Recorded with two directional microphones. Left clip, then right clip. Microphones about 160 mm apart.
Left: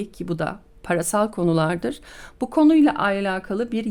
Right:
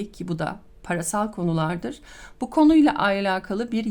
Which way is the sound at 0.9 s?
30° left (ahead or behind).